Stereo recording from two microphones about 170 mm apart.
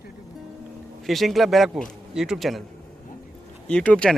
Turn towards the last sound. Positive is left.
turn(degrees=5)  # may be behind; listen again after turning